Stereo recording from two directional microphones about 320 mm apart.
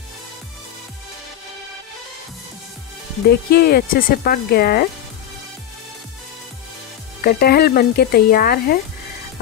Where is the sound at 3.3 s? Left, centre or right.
Left.